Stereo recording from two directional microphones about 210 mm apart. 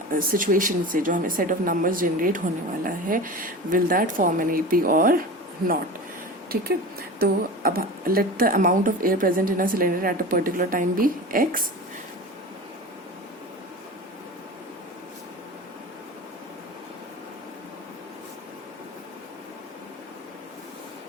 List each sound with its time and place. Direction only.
0.1 s speech: 40° right (ahead or behind)
7.2 s speech: 45° right (ahead or behind)